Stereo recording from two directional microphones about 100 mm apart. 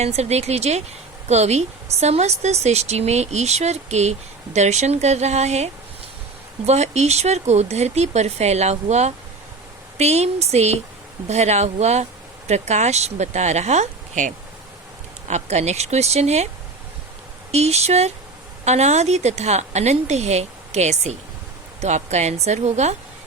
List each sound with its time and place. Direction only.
0.0 s speech: 90° right
6.7 s speech: 90° right
15.4 s speech: 90° right
17.5 s speech: 90° right
22.3 s speech: 90° right